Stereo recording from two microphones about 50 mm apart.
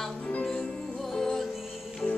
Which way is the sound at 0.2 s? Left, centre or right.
Left.